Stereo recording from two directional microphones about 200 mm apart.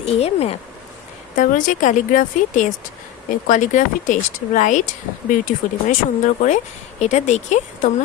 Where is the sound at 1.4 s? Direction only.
40° left (ahead or behind).